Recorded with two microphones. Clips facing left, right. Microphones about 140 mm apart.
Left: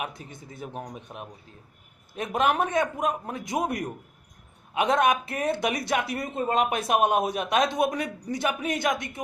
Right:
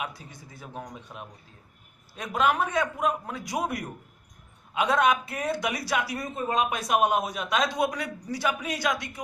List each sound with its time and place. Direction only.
0.1 s a man's voice: 25° left (ahead or behind)
4.8 s a man's voice: 25° left (ahead or behind)